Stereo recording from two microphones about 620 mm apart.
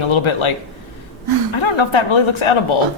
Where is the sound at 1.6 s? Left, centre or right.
Left.